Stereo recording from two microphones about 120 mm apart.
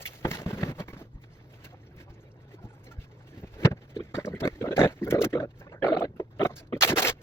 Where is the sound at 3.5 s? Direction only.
20° left (ahead or behind).